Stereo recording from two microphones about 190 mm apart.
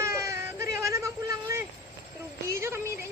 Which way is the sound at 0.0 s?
15° right (ahead or behind).